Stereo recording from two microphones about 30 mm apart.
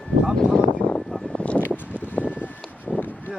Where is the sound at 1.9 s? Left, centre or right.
Left.